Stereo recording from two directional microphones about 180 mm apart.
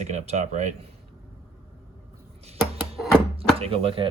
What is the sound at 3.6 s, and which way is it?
Speech, 30° right (ahead or behind).